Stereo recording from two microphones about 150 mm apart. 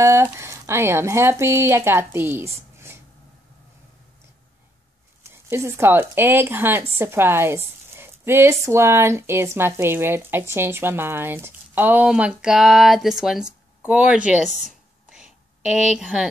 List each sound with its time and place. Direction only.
0.0 s speech: 20° right (ahead or behind)
5.2 s speech: 15° right (ahead or behind)
15.0 s a sound: 5° right (ahead or behind)